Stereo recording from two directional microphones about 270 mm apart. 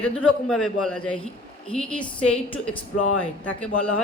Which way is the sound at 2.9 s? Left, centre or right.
Left.